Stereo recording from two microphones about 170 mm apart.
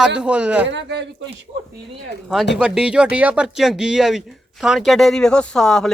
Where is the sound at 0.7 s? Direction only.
90° right.